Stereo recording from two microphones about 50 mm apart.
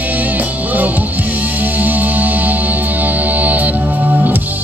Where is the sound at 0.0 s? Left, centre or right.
Right.